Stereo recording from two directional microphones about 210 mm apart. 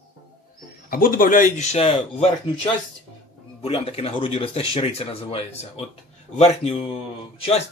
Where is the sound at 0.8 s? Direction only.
45° left (ahead or behind).